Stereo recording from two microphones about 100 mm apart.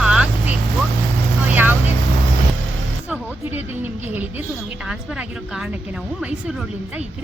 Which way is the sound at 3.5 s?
15° right (ahead or behind).